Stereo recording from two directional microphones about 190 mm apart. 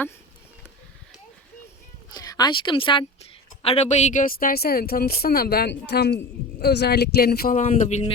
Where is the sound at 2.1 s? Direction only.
20° left (ahead or behind).